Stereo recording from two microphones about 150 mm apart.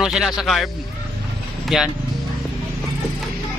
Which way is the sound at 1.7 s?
Centre (ahead or behind).